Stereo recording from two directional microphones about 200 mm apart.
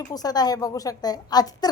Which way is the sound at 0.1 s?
20° left (ahead or behind).